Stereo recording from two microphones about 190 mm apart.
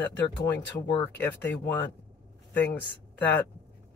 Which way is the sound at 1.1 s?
10° left (ahead or behind).